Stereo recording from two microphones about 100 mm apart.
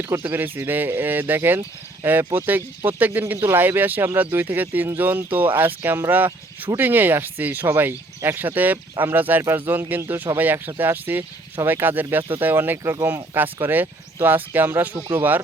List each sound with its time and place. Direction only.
0.0 s speech: 20° right (ahead or behind)